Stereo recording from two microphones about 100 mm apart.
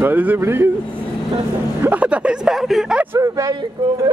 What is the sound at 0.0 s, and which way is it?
Speech, 15° right (ahead or behind).